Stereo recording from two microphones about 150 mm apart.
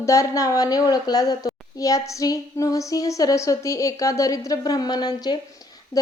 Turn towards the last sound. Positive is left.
turn(degrees=20)  # may be behind; listen again after turning